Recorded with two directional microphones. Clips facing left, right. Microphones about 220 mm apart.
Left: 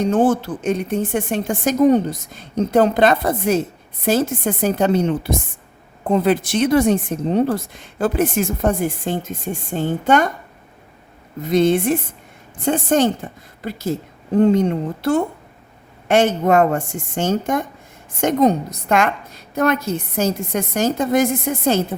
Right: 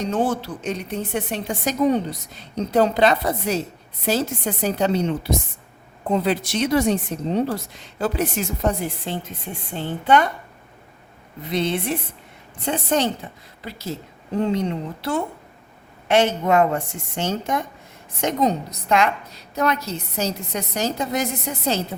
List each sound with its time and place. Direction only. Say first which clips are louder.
0.0 s a woman's voice: left 6 dB; 50° left (ahead or behind)
11.4 s a woman's voice: left 8 dB; 45° left (ahead or behind)